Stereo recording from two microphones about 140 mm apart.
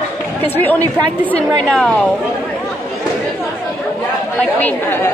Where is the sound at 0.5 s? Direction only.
15° left (ahead or behind).